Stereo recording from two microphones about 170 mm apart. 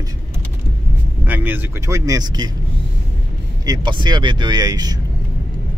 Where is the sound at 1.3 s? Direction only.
10° right (ahead or behind).